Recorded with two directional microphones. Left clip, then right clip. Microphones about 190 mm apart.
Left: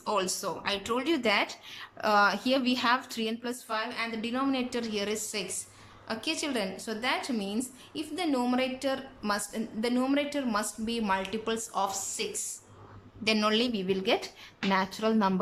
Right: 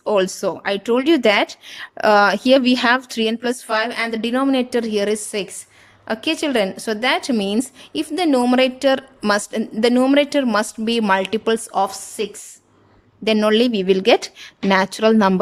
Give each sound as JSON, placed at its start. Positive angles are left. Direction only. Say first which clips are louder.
{"t": 0.0, "sound": "a woman's voice", "louder": "right 12 dB", "side_deg": -45}